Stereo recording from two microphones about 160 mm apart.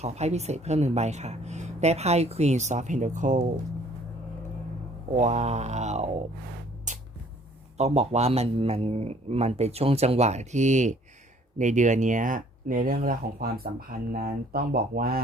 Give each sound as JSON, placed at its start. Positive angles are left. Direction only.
{"t": 0.0, "sound": "speech", "side_deg": -45}
{"t": 5.1, "sound": "speech", "side_deg": -45}
{"t": 7.8, "sound": "speech", "side_deg": -45}